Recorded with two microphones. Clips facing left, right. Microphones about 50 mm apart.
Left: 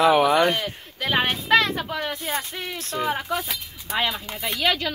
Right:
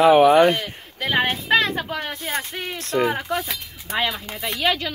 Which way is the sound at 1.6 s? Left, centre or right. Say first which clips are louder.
Right 1 dB; right.